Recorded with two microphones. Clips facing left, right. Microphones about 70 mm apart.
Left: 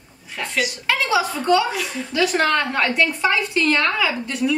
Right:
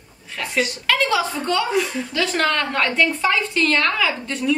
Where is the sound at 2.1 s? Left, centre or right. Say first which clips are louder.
Left 2 dB; left.